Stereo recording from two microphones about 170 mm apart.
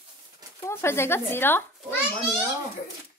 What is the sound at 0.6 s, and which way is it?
A child's voice, 15° left (ahead or behind).